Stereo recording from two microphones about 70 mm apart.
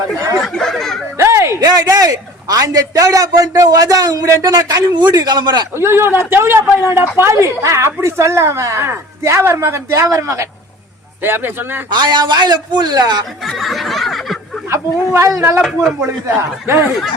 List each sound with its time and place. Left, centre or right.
0.4 s a sound: centre
1.1 s a sound: right
1.6 s a man's voice: right
5.7 s a man's voice: right
11.2 s a man's voice: right
11.9 s a man's voice: right
13.4 s a sound: centre
14.7 s speech: right
15.6 s speech: centre
16.0 s speech: right